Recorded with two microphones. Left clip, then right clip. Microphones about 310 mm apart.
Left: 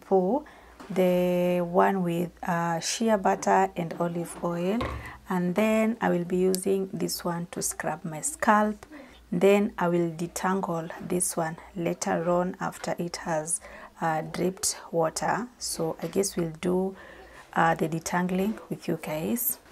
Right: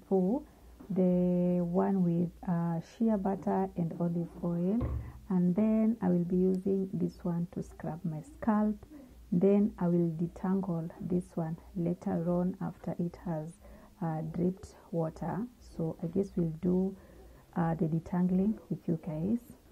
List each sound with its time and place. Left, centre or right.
0.1 s speech: left
0.9 s speech: centre